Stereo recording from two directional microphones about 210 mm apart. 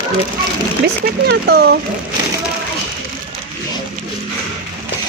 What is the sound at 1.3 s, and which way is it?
Speech, 50° right (ahead or behind).